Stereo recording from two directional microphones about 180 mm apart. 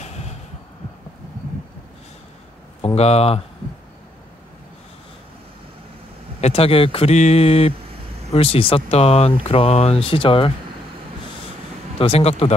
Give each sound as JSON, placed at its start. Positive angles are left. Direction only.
{"t": 0.0, "sound": "heart sounds", "side_deg": 35}
{"t": 2.8, "sound": "speech", "side_deg": 35}
{"t": 6.4, "sound": "speech", "side_deg": 35}
{"t": 12.0, "sound": "speech", "side_deg": 35}